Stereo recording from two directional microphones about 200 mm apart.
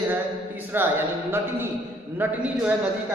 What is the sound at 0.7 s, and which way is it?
Speech, 10° right (ahead or behind).